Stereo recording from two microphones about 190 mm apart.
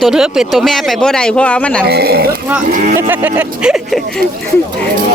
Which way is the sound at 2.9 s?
10° right (ahead or behind).